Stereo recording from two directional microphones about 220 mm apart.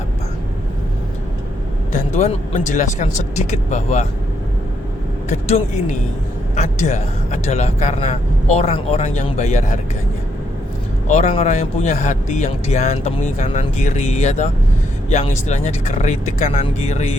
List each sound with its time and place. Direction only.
1.9 s a man's voice: 30° left (ahead or behind)
5.3 s a man's voice: 30° left (ahead or behind)
11.1 s a man's voice: 30° left (ahead or behind)